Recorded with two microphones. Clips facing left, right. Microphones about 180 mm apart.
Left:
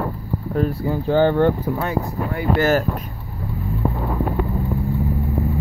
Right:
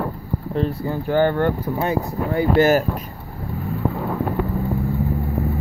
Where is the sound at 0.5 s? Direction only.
5° left (ahead or behind).